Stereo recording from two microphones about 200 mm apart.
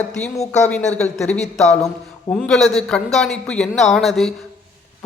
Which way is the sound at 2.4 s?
5° left (ahead or behind).